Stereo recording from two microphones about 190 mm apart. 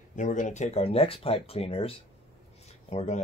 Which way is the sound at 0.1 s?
40° left (ahead or behind).